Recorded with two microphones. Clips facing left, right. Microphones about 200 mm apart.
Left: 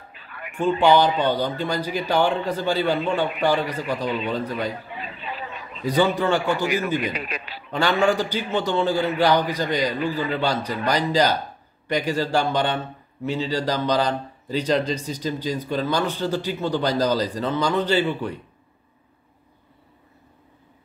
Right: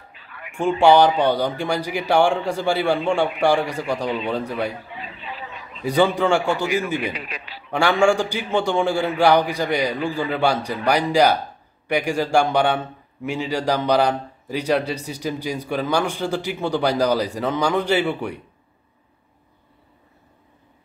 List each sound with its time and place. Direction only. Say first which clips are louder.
0.1 s a sound: left 3 dB; 50° left (ahead or behind)
0.6 s a man's voice: right 3 dB; 10° right (ahead or behind)
4.9 s a sound: left 1 dB; 50° left (ahead or behind)
5.9 s a man's voice: right 2 dB; 10° right (ahead or behind)
7.2 s a man's voice: left 3 dB; 45° left (ahead or behind)
7.7 s a man's voice: right 3 dB; 10° right (ahead or behind)